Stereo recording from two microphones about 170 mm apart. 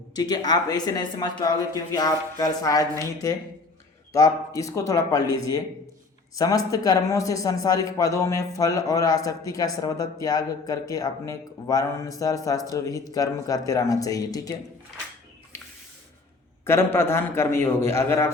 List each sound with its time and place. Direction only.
0.2 s a man's voice: 25° left (ahead or behind)
16.6 s a man's voice: 15° left (ahead or behind)